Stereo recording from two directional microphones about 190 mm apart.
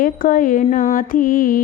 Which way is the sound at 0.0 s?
45° left (ahead or behind).